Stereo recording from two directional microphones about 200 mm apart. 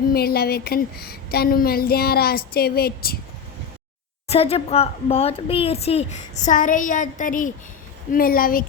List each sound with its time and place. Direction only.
0.1 s a woman's voice: 50° left (ahead or behind)
4.3 s a woman's voice: 30° left (ahead or behind); by 8.6 s 45° left (ahead or behind)